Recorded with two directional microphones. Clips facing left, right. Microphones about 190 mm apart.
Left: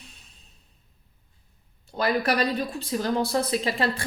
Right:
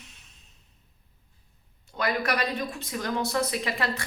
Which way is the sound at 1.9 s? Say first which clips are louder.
Left 4 dB; 30° left (ahead or behind).